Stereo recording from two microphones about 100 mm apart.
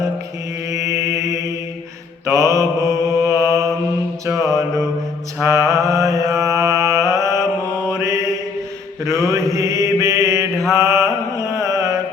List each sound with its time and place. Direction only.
0.7 s mantra: 30° right (ahead or behind)
5.4 s mantra: 30° right (ahead or behind)